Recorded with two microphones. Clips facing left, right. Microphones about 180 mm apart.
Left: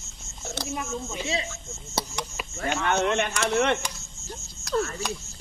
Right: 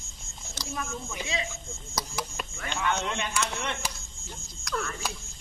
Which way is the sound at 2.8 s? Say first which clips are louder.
Left 5 dB; 60° left (ahead or behind).